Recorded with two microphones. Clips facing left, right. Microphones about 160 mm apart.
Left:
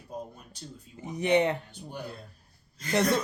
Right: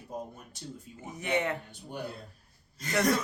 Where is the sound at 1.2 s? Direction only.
20° left (ahead or behind).